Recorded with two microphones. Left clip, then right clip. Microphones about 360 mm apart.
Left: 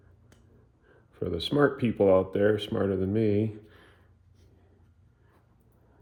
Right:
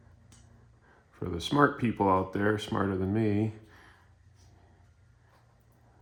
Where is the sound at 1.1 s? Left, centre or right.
Centre.